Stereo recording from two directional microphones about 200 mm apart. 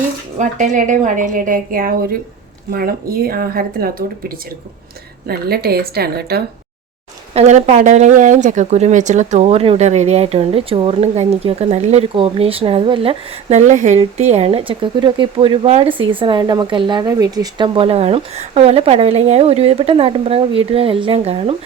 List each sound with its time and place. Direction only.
0.3 s speech: 40° right (ahead or behind)
7.3 s speech: 35° right (ahead or behind)